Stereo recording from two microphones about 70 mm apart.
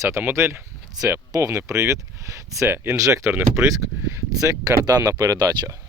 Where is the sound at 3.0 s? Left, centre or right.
Right.